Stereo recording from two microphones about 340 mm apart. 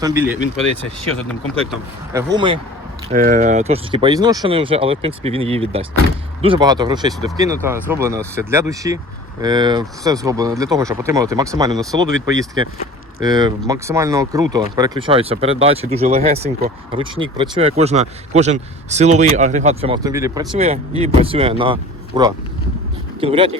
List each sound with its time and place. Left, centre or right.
0.0 s speech: centre
2.3 s speech: centre